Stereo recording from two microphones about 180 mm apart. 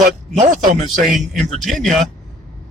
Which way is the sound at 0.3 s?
45° right (ahead or behind).